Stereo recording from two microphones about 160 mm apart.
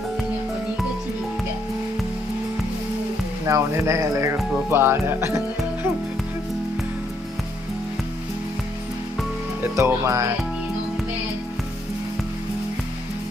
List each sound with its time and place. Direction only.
3.4 s speech: 20° right (ahead or behind)
9.6 s speech: 15° right (ahead or behind)